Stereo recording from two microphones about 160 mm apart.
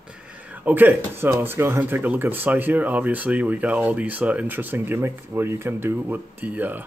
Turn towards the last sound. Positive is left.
turn(degrees=-10)  # may be behind; listen again after turning